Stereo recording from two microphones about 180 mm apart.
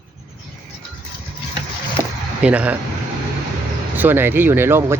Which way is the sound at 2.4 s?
5° right (ahead or behind).